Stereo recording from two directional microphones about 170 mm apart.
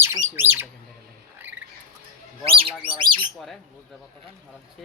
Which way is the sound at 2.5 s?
30° right (ahead or behind).